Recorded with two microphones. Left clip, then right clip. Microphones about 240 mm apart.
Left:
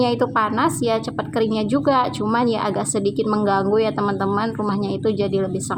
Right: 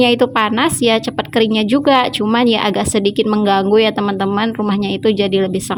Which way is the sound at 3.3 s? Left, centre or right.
Right.